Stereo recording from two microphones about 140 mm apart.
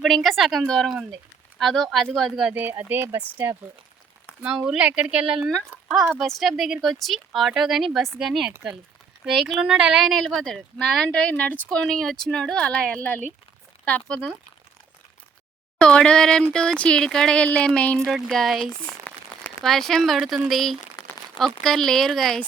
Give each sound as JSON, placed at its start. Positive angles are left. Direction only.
{"t": 0.0, "sound": "speech", "side_deg": 0}
{"t": 4.4, "sound": "speech", "side_deg": -5}
{"t": 15.8, "sound": "speech", "side_deg": 5}